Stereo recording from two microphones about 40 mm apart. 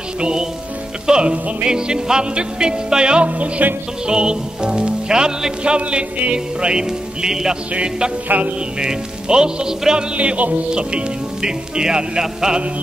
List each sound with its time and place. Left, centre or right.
0.2 s music: centre
3.3 s music: right
4.1 s music: right
8.3 s music: right
8.7 s music: centre
10.1 s music: right; by 12.6 s centre